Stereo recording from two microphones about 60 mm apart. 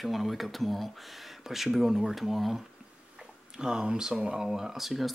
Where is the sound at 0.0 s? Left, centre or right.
Centre.